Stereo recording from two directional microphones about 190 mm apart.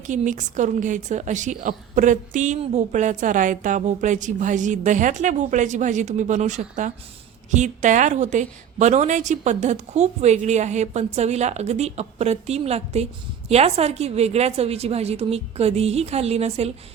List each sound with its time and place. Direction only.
0.1 s a woman's voice: 40° right (ahead or behind)